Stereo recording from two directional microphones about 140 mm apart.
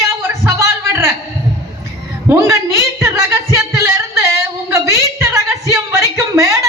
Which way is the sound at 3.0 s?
20° right (ahead or behind).